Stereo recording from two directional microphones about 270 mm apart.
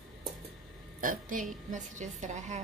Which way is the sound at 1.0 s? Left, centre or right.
Right.